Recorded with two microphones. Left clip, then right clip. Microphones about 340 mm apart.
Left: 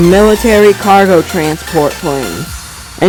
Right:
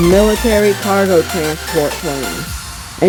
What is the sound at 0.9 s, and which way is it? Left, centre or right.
Speech, left.